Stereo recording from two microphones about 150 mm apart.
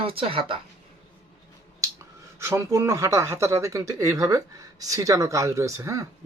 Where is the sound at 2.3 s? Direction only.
15° right (ahead or behind).